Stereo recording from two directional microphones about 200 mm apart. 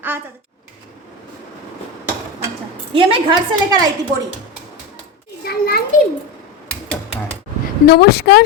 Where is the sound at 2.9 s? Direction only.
25° right (ahead or behind).